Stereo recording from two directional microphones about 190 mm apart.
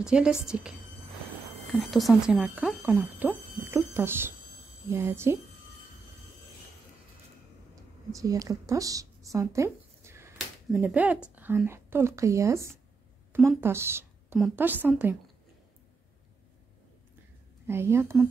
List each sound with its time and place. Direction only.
0.0 s a woman's voice: 5° right (ahead or behind)
1.7 s speech: centre (ahead or behind)
8.1 s a woman's voice: 15° right (ahead or behind)
17.6 s speech: 15° right (ahead or behind)